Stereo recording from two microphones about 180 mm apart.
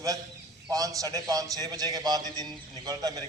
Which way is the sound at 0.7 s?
20° right (ahead or behind).